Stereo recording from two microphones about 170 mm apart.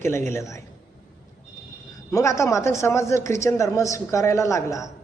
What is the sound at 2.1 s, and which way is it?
A man's voice, 20° left (ahead or behind).